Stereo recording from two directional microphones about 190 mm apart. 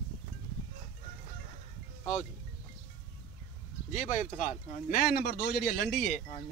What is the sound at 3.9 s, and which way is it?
Speech, 45° left (ahead or behind).